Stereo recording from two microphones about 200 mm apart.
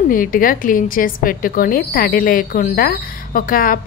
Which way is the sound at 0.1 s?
45° left (ahead or behind).